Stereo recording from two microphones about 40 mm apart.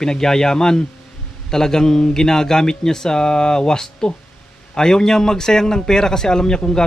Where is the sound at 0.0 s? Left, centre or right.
Centre.